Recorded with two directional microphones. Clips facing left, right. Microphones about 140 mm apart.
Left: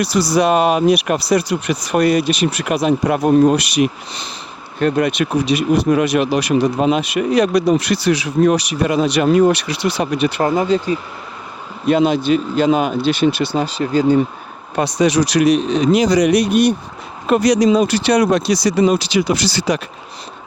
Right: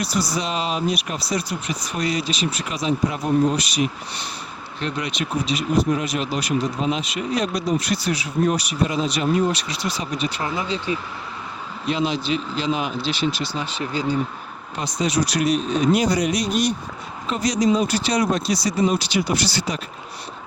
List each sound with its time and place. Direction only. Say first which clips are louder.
0.0 s speech: left 9 dB; 80° left
4.8 s speech: left 11 dB; 50° left (ahead or behind)
10.4 s speech: left 10 dB; 45° left (ahead or behind)
13.7 s speech: left 10 dB; 40° left (ahead or behind)
14.8 s speech: left 8 dB; 75° left (ahead or behind)